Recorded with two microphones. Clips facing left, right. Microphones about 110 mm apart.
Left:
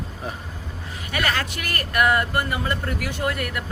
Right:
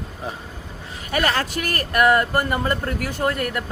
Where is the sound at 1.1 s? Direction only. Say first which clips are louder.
Right 4 dB; 35° right (ahead or behind).